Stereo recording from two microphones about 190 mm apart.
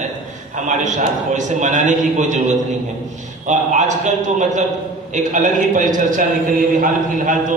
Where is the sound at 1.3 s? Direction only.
40° right (ahead or behind).